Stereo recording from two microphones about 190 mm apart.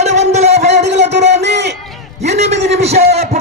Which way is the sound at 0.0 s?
35° right (ahead or behind).